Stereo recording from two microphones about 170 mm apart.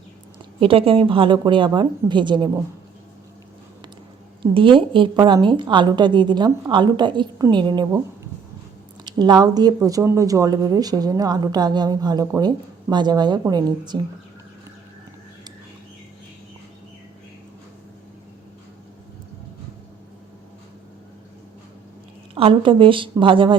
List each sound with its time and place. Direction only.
0.6 s speech: 35° right (ahead or behind)
4.5 s speech: 30° right (ahead or behind)
9.0 s speech: 25° right (ahead or behind)
22.4 s a woman's voice: 30° right (ahead or behind)